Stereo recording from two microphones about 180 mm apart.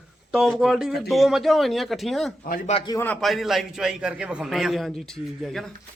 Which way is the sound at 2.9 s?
10° left (ahead or behind).